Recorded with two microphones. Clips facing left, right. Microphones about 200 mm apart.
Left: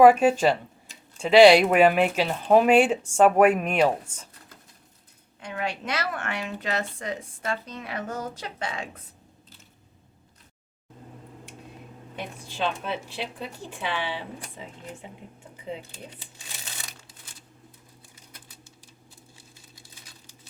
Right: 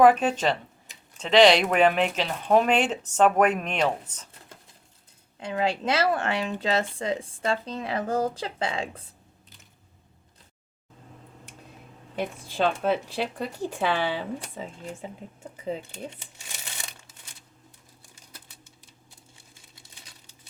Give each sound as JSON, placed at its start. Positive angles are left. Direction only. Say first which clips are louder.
{"t": 0.0, "sound": "speech", "louder": "left 3 dB", "side_deg": 5}
{"t": 5.4, "sound": "speech", "louder": "right 5 dB", "side_deg": -30}
{"t": 12.6, "sound": "speech", "louder": "right 5 dB", "side_deg": -45}